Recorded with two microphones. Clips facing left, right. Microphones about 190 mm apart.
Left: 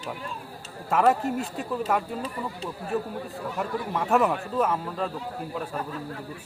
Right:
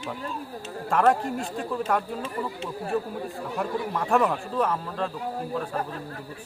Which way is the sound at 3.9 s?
5° left (ahead or behind).